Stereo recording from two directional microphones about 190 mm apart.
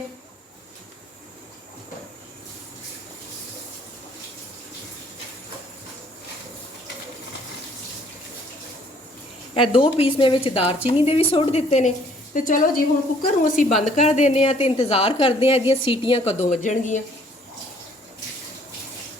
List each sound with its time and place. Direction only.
9.6 s a woman's voice: 30° left (ahead or behind)